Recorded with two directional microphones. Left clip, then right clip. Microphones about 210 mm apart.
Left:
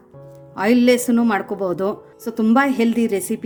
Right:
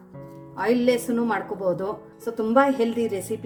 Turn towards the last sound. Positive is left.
turn(degrees=50)  # may be behind; listen again after turning